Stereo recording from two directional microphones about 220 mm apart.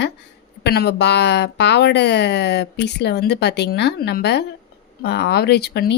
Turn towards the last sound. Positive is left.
turn(degrees=45)  # may be behind; listen again after turning